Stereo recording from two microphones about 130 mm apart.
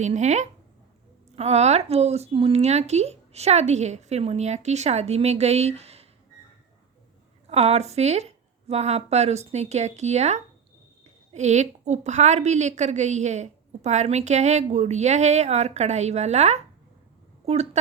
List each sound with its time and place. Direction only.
0.0 s a woman's voice: 65° right (ahead or behind)
7.4 s a woman's voice: 55° right (ahead or behind)